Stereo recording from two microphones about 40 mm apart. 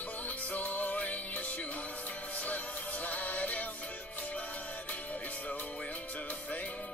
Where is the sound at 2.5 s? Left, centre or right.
Left.